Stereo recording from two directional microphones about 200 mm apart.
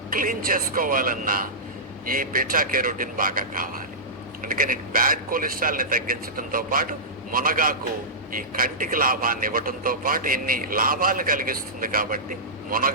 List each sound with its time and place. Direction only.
0.1 s a man's voice: 45° right (ahead or behind)